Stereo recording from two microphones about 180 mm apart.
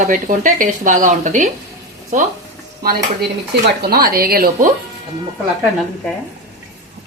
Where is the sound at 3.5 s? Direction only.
70° right (ahead or behind).